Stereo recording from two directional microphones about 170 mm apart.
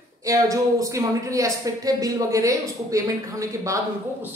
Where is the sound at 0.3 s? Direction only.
20° right (ahead or behind).